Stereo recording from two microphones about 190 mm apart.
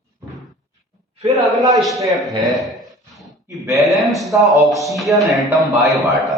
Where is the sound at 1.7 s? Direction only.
Centre (ahead or behind).